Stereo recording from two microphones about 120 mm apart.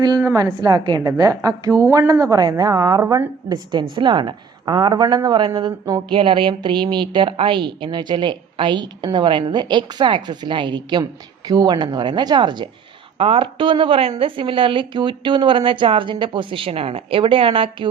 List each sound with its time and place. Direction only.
0.6 s a woman's voice: 35° right (ahead or behind)
3.5 s a woman's voice: 40° right (ahead or behind)
6.1 s a woman's voice: 45° right (ahead or behind)
13.1 s speech: 50° right (ahead or behind)